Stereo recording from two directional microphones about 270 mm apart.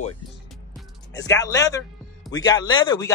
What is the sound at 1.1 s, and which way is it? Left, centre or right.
Speech, centre.